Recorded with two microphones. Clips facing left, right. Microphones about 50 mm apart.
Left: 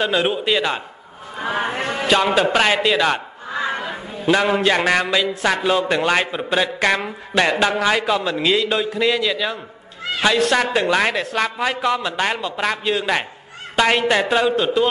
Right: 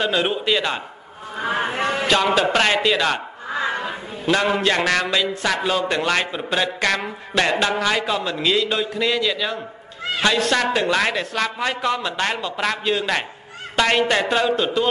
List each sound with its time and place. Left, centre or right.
0.0 s speech: centre
1.8 s a man's voice: right
2.0 s a man's voice: centre
4.3 s a man's voice: centre